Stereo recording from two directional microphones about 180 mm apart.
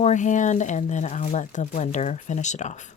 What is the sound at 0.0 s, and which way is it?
Speech, 40° left (ahead or behind).